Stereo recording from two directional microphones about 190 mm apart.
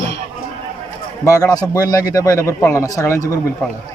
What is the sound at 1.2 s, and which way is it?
Speech, 20° left (ahead or behind).